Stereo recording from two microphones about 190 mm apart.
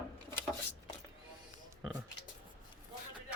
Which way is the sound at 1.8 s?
Centre (ahead or behind).